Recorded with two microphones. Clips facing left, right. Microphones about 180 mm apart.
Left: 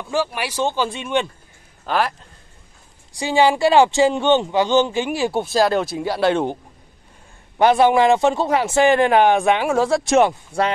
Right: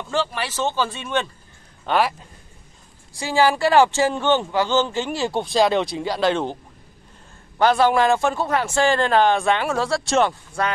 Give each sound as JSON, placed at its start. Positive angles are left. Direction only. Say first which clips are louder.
{"t": 0.1, "sound": "speech", "louder": "left 2 dB", "side_deg": 10}
{"t": 1.9, "sound": "a man's voice", "louder": "right 1 dB", "side_deg": 0}
{"t": 3.2, "sound": "speech", "louder": "left 2 dB", "side_deg": 20}